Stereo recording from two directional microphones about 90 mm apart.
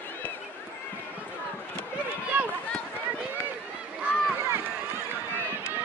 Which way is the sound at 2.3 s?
20° right (ahead or behind).